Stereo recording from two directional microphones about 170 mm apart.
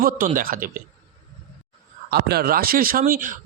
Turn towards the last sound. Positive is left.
turn(degrees=-55)  # may be behind; listen again after turning